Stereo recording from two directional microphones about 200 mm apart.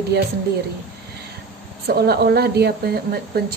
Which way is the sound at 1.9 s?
50° right (ahead or behind).